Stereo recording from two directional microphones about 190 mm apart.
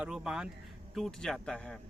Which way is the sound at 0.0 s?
5° right (ahead or behind).